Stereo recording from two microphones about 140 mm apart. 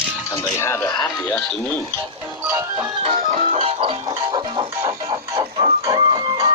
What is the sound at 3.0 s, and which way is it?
Music, 45° right (ahead or behind).